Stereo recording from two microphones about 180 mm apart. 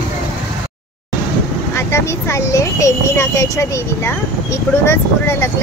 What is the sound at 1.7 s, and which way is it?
Speech, 15° left (ahead or behind).